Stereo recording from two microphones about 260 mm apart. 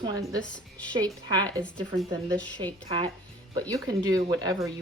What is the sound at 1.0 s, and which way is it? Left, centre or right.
Speech, centre.